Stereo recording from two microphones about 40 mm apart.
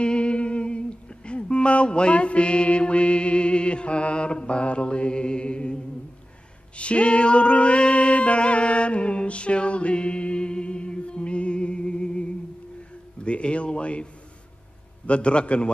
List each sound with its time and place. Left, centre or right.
0.0 s music: left
6.8 s music: left
13.2 s speech: left
15.0 s speech: left